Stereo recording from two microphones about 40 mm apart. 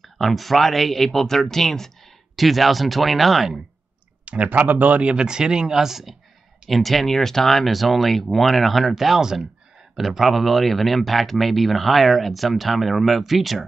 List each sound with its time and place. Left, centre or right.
0.0 s speech: centre
4.2 s speech: right
4.6 s speech: right
5.0 s speech: right
6.7 s speech: centre
9.2 s speech: centre
9.9 s speech: centre